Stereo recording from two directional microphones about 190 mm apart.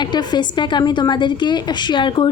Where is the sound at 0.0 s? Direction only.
20° left (ahead or behind).